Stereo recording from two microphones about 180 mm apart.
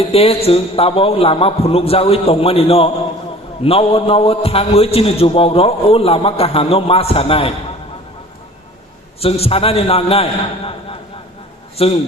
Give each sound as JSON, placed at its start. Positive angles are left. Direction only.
{"t": 0.0, "sound": "a man's voice", "side_deg": 35}
{"t": 9.2, "sound": "a man's voice", "side_deg": 35}
{"t": 11.8, "sound": "a man's voice", "side_deg": 30}